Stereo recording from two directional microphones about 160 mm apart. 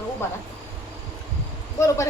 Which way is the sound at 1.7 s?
20° left (ahead or behind).